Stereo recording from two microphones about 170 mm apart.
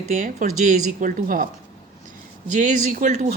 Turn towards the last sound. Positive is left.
turn(degrees=-50)  # may be behind; listen again after turning